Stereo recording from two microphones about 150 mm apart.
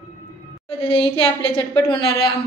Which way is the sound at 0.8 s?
35° left (ahead or behind).